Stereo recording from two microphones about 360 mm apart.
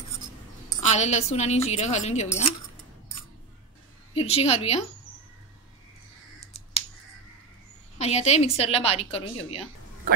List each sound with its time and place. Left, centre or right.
0.7 s a woman's voice: centre
4.1 s a woman's voice: centre
8.0 s a woman's voice: centre